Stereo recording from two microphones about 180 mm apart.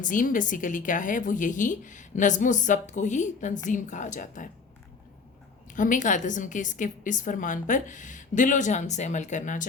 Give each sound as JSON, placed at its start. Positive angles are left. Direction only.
{"t": 0.0, "sound": "a woman's voice", "side_deg": 50}
{"t": 5.7, "sound": "a woman's voice", "side_deg": 45}